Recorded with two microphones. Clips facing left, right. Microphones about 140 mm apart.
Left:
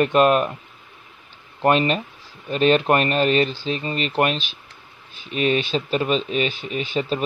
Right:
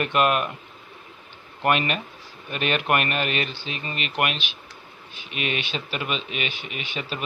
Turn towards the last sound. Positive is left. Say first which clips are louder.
# left 9 dB
turn(degrees=35)  # may be behind; listen again after turning